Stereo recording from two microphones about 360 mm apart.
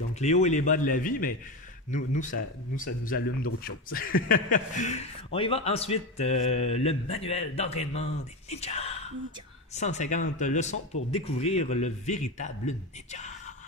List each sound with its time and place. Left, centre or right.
0.2 s a man's voice: centre